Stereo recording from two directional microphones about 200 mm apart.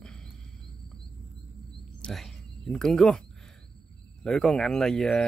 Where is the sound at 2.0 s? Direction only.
Centre (ahead or behind).